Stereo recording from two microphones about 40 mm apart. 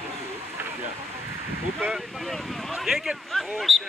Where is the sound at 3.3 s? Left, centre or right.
Centre.